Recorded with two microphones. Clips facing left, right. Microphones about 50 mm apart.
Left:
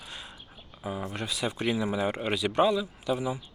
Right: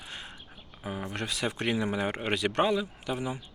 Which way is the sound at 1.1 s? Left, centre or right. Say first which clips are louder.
Right 2 dB; right.